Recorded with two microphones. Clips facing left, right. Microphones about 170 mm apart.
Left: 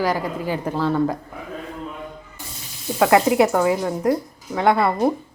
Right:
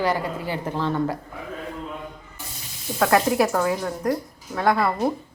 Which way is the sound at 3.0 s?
20° left (ahead or behind).